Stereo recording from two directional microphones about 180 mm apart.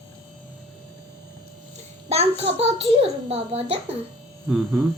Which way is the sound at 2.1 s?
35° right (ahead or behind).